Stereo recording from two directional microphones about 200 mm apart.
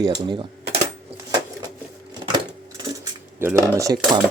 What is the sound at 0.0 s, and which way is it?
Speech, 25° right (ahead or behind).